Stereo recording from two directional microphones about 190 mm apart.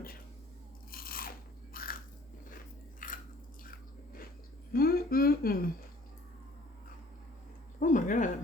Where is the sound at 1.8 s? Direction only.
50° left (ahead or behind).